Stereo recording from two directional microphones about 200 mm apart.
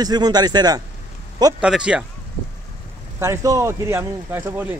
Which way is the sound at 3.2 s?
15° right (ahead or behind).